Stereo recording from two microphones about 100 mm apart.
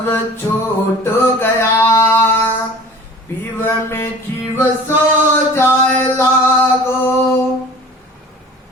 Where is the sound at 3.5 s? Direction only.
25° left (ahead or behind).